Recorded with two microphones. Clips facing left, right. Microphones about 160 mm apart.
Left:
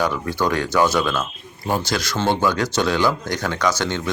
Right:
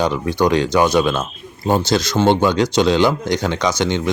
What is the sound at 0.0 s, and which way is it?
Speech, 20° right (ahead or behind).